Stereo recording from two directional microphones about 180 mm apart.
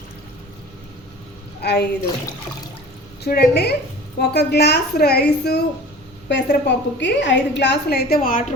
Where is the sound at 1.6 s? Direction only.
65° left (ahead or behind).